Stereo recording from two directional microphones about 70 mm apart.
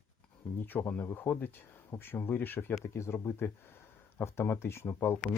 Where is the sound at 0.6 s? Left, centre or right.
Left.